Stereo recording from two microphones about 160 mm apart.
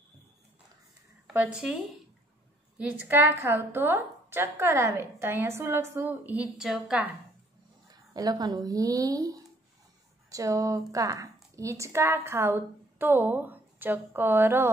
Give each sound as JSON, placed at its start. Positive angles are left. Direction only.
{"t": 1.3, "sound": "a woman's voice", "side_deg": -10}
{"t": 2.8, "sound": "a woman's voice", "side_deg": -10}
{"t": 7.9, "sound": "a woman's voice", "side_deg": -25}